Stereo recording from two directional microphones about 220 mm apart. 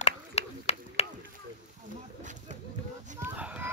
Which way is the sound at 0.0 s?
30° left (ahead or behind).